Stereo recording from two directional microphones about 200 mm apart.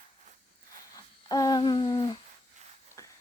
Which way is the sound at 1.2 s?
20° left (ahead or behind).